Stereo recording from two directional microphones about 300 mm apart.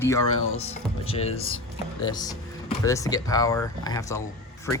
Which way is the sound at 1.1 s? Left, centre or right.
Centre.